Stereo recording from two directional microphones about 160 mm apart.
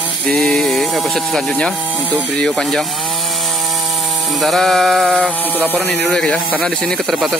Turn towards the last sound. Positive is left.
turn(degrees=0)  # may be behind; listen again after turning